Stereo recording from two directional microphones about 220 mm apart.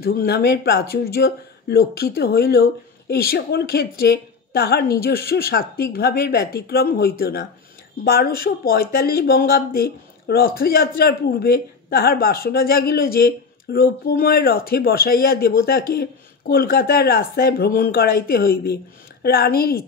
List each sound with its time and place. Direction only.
0.0 s speech: 45° left (ahead or behind)